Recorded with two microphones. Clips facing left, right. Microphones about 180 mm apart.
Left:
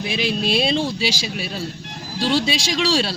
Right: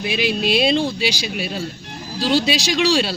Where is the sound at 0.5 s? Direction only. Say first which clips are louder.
Right 4 dB; centre (ahead or behind).